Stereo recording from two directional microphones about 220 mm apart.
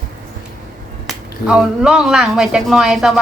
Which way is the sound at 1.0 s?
5° right (ahead or behind).